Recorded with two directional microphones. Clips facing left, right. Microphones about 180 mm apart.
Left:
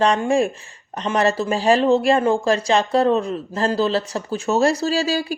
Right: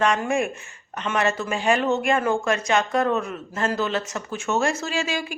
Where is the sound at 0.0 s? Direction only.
30° left (ahead or behind).